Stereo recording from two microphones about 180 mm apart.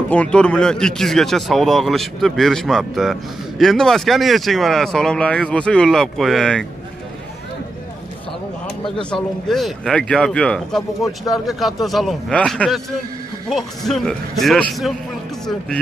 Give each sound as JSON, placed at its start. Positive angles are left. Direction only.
{"t": 0.1, "sound": "speech", "side_deg": 5}
{"t": 9.1, "sound": "speech", "side_deg": 0}